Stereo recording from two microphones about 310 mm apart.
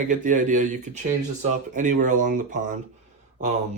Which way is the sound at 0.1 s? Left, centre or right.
Right.